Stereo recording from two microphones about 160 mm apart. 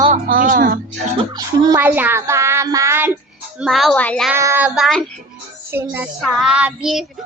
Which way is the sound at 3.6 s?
Centre (ahead or behind).